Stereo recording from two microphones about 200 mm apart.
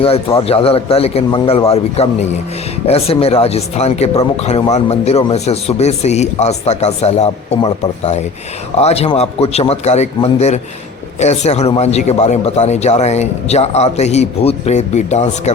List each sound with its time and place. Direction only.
0.0 s a man's voice: 30° left (ahead or behind)